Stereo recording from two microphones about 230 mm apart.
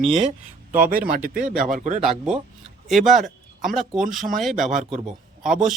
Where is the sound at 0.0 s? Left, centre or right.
Right.